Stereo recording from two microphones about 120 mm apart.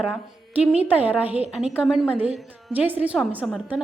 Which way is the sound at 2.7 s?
15° right (ahead or behind).